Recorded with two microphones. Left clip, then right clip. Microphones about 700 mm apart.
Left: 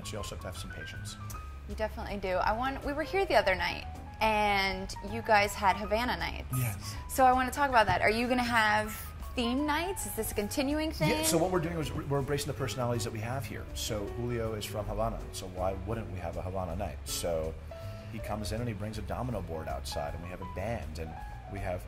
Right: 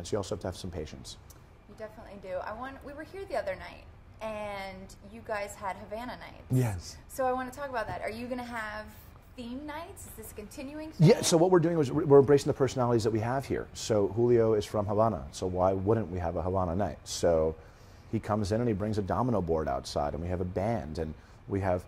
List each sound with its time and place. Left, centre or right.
0.1 s a man's voice: right
1.8 s a woman's voice: left
11.1 s a man's voice: right